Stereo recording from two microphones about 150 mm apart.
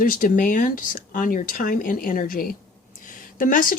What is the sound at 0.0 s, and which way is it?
Speech, 70° left (ahead or behind).